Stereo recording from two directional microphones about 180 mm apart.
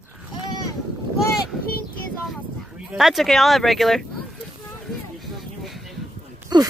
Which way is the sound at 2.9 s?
Centre (ahead or behind).